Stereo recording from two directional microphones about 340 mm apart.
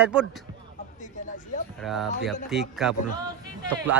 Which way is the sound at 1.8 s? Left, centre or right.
Centre.